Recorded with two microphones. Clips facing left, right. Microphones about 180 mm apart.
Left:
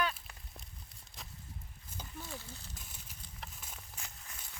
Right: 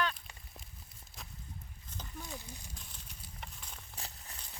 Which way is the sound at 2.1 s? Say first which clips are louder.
Right 1 dB; 15° right (ahead or behind).